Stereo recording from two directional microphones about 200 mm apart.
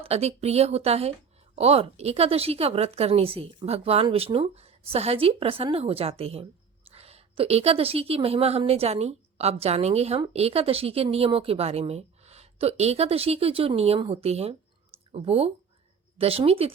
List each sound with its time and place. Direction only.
0.0 s a woman's voice: 30° right (ahead or behind)